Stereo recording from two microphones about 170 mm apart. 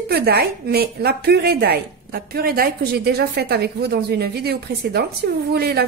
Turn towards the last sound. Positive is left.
turn(degrees=-70)  # may be behind; listen again after turning